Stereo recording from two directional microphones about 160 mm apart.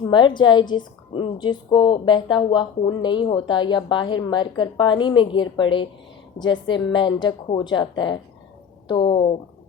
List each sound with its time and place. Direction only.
0.0 s a woman's voice: 30° left (ahead or behind)